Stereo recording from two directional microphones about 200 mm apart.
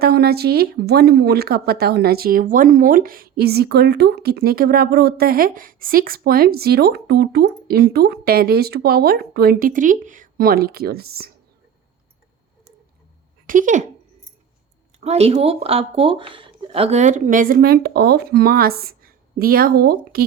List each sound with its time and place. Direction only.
0.0 s speech: 50° right (ahead or behind)
13.5 s speech: 40° right (ahead or behind)
15.0 s speech: 30° right (ahead or behind); by 20.2 s 50° right (ahead or behind)